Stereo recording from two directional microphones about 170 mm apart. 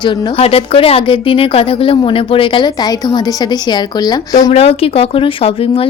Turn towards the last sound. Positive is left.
turn(degrees=35)  # may be behind; listen again after turning